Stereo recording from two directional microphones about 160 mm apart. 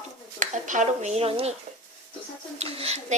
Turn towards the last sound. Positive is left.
turn(degrees=-40)  # may be behind; listen again after turning